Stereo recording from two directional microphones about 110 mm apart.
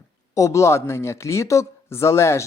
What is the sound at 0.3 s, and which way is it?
Speech, 30° left (ahead or behind).